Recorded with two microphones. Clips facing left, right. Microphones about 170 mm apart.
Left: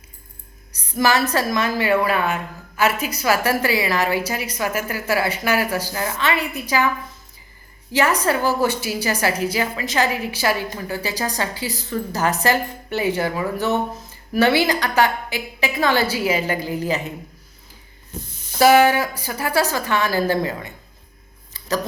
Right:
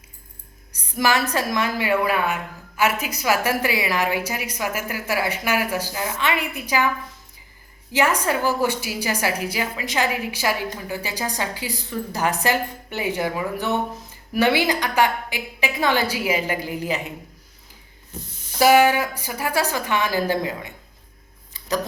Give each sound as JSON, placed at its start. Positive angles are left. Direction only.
{"t": 0.9, "sound": "a woman's voice", "side_deg": -15}
{"t": 7.9, "sound": "a woman's voice", "side_deg": -15}
{"t": 18.6, "sound": "a woman's voice", "side_deg": -15}